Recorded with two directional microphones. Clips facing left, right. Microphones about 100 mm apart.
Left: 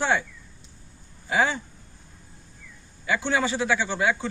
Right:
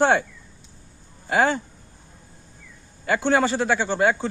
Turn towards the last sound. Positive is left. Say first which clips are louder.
# right 4 dB
turn(degrees=-45)  # may be behind; listen again after turning